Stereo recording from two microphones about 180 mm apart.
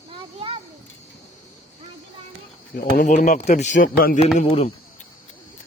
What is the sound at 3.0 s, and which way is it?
Speech, 45° left (ahead or behind).